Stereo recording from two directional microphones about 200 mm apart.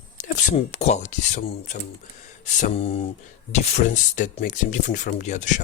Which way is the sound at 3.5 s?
35° left (ahead or behind).